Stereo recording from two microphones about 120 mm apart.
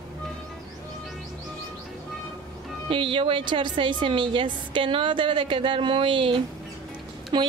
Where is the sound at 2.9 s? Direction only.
45° right (ahead or behind).